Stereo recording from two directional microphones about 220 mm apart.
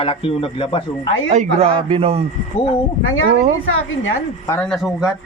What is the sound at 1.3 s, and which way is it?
Speech, 30° right (ahead or behind).